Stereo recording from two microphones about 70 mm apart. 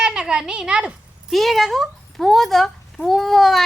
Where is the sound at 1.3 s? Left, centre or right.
Centre.